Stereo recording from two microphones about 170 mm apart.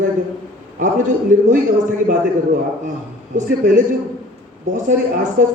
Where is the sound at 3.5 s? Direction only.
50° right (ahead or behind).